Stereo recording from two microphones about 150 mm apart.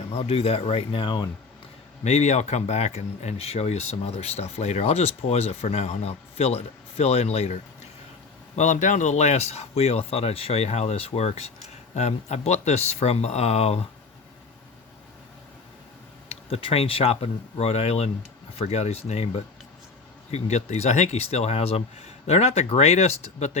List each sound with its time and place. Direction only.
0.1 s speech: 40° left (ahead or behind)
2.0 s speech: 50° left (ahead or behind)
16.3 s speech: 40° left (ahead or behind)